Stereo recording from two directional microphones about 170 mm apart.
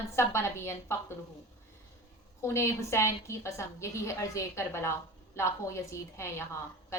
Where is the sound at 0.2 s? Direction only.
15° left (ahead or behind).